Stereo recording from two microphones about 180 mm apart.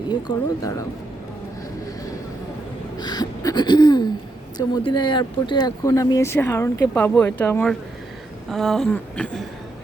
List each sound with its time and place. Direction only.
0.1 s speech: 20° left (ahead or behind)
3.0 s throat clearing: 25° left (ahead or behind)
4.5 s speech: 25° left (ahead or behind)
8.4 s a sound: centre (ahead or behind)